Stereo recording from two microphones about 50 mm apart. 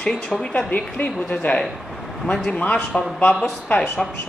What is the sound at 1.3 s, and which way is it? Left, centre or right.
Speech, left.